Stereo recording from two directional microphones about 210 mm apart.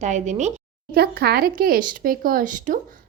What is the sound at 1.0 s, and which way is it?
Speech, 50° right (ahead or behind).